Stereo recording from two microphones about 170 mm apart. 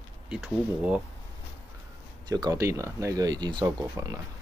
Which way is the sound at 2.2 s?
25° right (ahead or behind).